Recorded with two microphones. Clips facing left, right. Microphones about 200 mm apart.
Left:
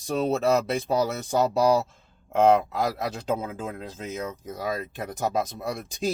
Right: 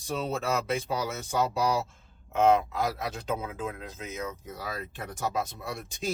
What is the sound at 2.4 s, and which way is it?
Speech, 35° left (ahead or behind).